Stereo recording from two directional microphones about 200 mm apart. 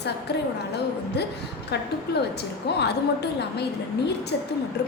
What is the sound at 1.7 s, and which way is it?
A woman's voice, 55° left (ahead or behind).